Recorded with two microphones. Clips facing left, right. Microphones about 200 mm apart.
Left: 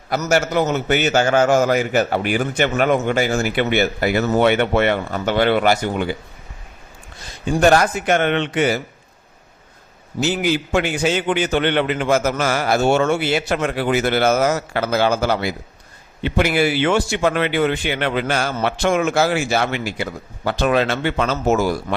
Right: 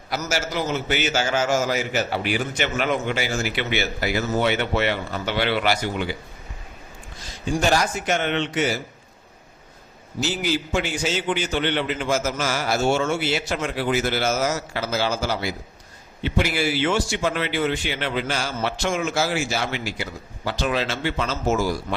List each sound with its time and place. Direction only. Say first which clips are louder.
0.1 s a man's voice: left 8 dB; 60° left (ahead or behind)
7.5 s a man's voice: left 7 dB; 60° left (ahead or behind)
10.2 s a man's voice: left 5 dB; 60° left (ahead or behind)